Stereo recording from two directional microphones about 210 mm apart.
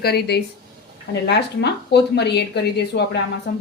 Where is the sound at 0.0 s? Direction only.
50° left (ahead or behind).